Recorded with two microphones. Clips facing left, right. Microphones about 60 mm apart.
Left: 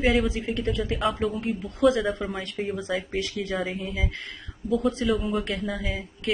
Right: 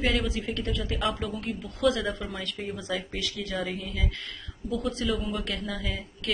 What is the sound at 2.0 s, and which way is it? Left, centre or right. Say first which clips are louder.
Speech: left 4 dB; centre.